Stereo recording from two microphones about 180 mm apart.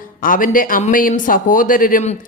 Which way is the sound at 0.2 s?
50° left (ahead or behind).